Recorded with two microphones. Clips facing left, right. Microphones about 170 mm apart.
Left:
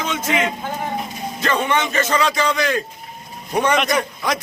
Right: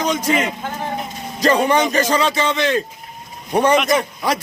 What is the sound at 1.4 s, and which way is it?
A man's voice, 35° right (ahead or behind).